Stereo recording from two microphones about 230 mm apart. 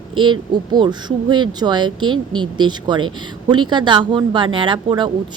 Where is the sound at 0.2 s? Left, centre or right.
Centre.